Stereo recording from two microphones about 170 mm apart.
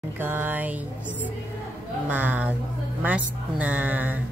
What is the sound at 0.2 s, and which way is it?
Speech, 10° right (ahead or behind).